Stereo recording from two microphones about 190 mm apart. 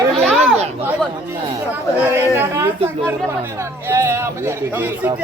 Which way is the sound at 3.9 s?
15° right (ahead or behind).